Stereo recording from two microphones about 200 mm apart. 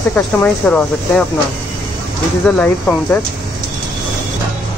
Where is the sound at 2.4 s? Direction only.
10° left (ahead or behind).